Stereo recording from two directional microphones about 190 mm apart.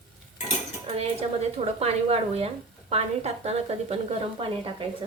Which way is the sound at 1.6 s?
30° right (ahead or behind).